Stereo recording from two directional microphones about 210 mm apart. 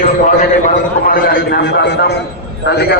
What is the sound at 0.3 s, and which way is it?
A man's voice, 40° left (ahead or behind).